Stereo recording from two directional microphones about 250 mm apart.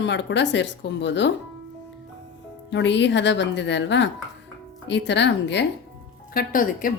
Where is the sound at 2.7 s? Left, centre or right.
Left.